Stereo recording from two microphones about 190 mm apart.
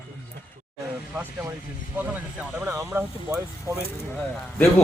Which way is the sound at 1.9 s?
10° right (ahead or behind).